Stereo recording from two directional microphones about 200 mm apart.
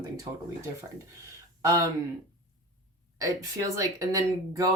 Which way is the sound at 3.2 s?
15° right (ahead or behind).